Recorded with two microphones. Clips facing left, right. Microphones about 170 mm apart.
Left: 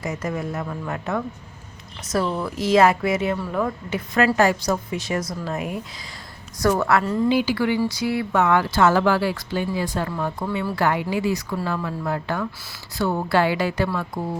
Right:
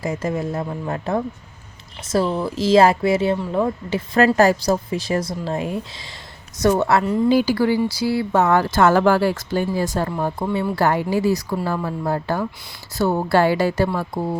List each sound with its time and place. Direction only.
0.0 s a woman's voice: 30° right (ahead or behind)
7.3 s a woman's voice: 40° right (ahead or behind)